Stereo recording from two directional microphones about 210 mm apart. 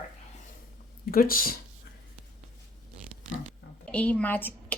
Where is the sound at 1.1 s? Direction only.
45° left (ahead or behind).